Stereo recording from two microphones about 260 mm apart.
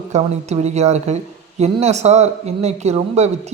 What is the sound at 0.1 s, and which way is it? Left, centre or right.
A woman's voice, right.